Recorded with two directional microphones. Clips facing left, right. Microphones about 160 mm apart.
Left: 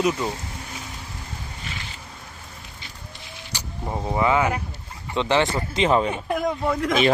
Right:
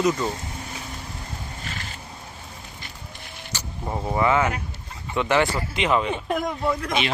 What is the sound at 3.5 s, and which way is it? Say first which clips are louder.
Vehicle: even; 15° left (ahead or behind).